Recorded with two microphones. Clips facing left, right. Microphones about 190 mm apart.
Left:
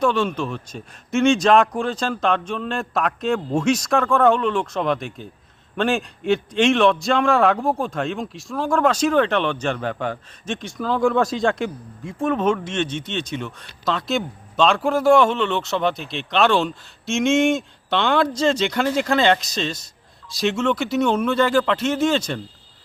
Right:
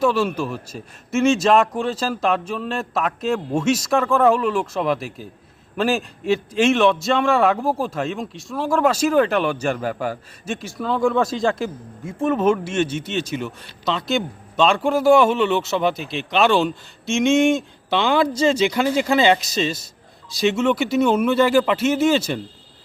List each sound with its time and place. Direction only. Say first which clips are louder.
0.0 s a man's voice: right 1 dB; 5° right (ahead or behind)